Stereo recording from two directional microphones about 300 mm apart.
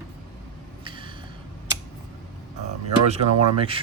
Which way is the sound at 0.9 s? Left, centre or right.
Centre.